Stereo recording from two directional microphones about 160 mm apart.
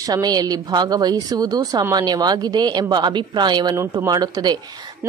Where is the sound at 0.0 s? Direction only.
25° right (ahead or behind).